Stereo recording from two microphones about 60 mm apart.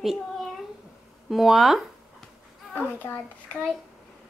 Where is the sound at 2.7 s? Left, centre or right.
Left.